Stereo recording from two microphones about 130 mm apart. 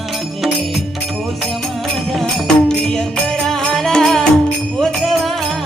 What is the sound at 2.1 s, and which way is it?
Music, 5° left (ahead or behind).